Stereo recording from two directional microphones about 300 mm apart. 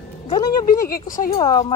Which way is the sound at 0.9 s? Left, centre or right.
Left.